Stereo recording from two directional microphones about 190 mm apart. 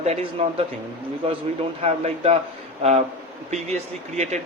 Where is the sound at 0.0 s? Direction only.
35° right (ahead or behind).